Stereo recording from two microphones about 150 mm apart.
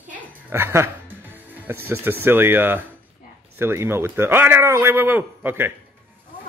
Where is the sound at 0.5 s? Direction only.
15° right (ahead or behind).